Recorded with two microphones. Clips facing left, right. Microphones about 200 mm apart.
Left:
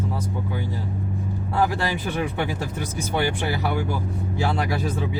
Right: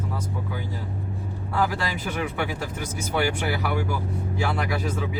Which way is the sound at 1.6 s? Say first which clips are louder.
Left 3 dB; 25° left (ahead or behind).